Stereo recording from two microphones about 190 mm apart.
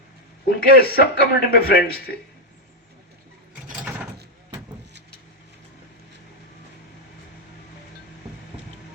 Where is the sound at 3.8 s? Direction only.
10° right (ahead or behind).